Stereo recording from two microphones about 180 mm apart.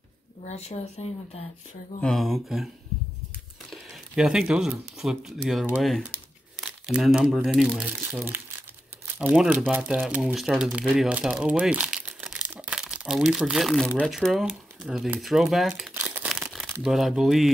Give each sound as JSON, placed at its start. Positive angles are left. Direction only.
{"t": 0.5, "sound": "speech", "side_deg": 35}
{"t": 2.0, "sound": "speech", "side_deg": 5}
{"t": 3.7, "sound": "speech", "side_deg": -5}
{"t": 15.9, "sound": "crumpling", "side_deg": -10}
{"t": 16.8, "sound": "speech", "side_deg": 0}